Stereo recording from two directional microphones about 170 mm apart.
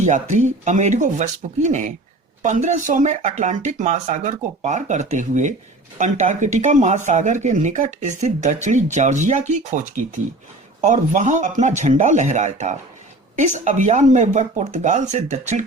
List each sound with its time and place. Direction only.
0.0 s speech: 45° right (ahead or behind)